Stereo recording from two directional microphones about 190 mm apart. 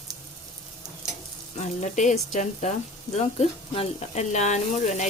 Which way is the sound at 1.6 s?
40° left (ahead or behind).